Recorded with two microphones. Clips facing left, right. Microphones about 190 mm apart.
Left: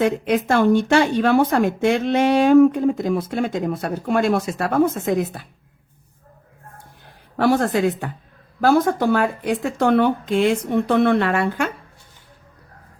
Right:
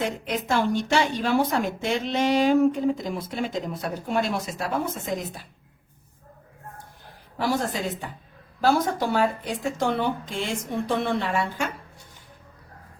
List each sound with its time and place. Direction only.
0.0 s a woman's voice: 55° left (ahead or behind)
7.3 s a woman's voice: 65° left (ahead or behind)